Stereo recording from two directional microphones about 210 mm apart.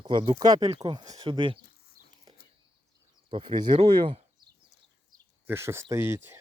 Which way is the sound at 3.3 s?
25° right (ahead or behind).